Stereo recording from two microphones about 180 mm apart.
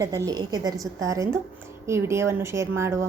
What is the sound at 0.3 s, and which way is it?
A woman's voice, 20° right (ahead or behind).